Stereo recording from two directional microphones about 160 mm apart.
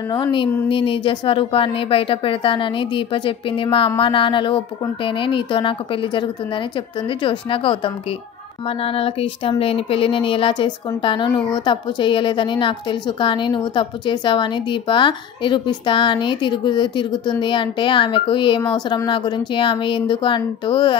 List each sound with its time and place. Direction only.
0.1 s speech: 30° left (ahead or behind)